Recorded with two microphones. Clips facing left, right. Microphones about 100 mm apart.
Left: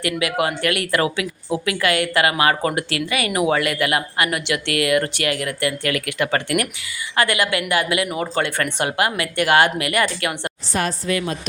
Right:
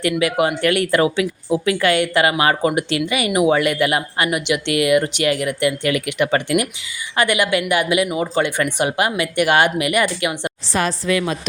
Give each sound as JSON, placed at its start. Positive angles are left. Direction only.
{"t": 0.0, "sound": "speech", "side_deg": -25}
{"t": 10.7, "sound": "a woman's voice", "side_deg": -90}